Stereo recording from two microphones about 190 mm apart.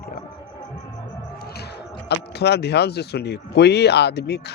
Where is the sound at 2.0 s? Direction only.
60° left (ahead or behind).